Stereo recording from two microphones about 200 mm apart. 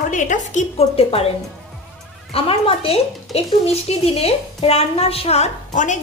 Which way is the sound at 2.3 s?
30° left (ahead or behind).